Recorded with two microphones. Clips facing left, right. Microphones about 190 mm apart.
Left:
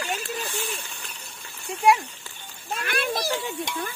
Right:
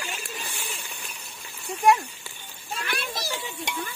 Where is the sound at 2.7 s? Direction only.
55° left (ahead or behind).